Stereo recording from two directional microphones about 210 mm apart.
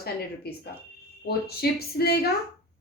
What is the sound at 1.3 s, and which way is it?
A woman's voice, 50° left (ahead or behind).